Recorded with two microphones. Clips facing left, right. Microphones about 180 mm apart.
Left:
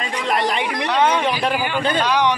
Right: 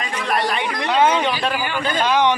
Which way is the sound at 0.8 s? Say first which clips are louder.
Right 2 dB; 5° right (ahead or behind).